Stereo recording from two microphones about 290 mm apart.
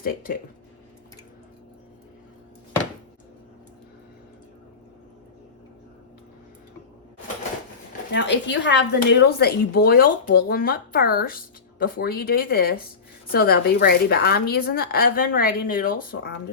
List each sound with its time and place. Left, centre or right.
0.0 s speech: left
8.1 s speech: left